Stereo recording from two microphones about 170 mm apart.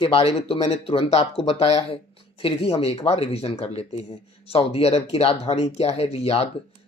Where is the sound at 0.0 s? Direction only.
35° left (ahead or behind).